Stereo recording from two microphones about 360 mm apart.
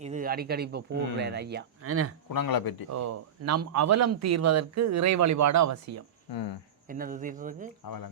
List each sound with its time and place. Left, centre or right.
0.0 s speech: right
2.3 s speech: left
2.9 s speech: right
6.8 s speech: right
7.9 s speech: left